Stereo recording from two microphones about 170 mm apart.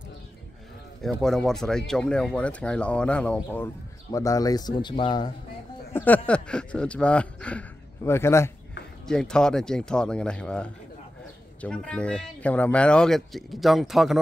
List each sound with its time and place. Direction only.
1.0 s speech: 5° left (ahead or behind)
3.5 s speech: 15° left (ahead or behind)
5.9 s speech: 10° left (ahead or behind)
9.0 s speech: 5° left (ahead or behind)